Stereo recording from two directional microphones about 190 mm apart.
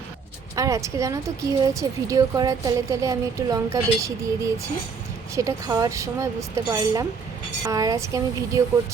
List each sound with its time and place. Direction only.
0.5 s speech: 15° right (ahead or behind)